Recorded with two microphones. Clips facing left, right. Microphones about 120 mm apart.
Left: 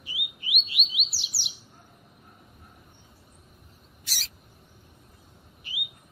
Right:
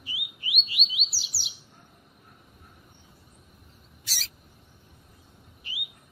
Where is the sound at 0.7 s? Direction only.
Centre (ahead or behind).